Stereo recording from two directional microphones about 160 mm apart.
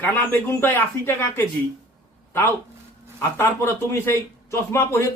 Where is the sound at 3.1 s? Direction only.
15° left (ahead or behind).